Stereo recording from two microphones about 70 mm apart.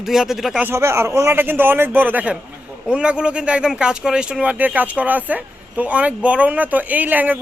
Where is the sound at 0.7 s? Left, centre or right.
Right.